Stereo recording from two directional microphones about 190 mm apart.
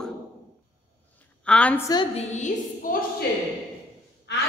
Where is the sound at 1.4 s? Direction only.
5° left (ahead or behind).